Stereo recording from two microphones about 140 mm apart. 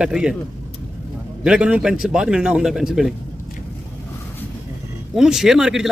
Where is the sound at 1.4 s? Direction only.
10° right (ahead or behind).